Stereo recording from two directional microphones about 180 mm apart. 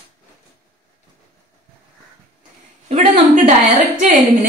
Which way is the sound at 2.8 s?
40° right (ahead or behind).